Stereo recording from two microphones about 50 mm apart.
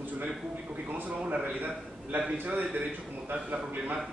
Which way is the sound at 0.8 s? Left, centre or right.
Right.